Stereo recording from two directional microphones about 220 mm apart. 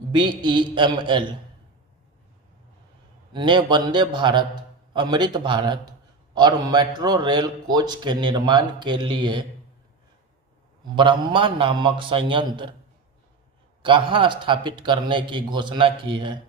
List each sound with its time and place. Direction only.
0.1 s speech: 20° right (ahead or behind)
3.3 s speech: 20° right (ahead or behind)
10.9 s speech: 20° right (ahead or behind)
13.8 s speech: 20° right (ahead or behind)